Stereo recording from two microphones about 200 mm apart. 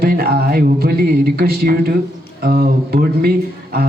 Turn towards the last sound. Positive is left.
turn(degrees=-50)  # may be behind; listen again after turning